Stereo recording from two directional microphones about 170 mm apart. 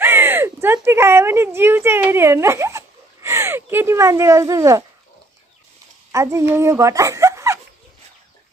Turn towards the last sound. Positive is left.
turn(degrees=-15)  # may be behind; listen again after turning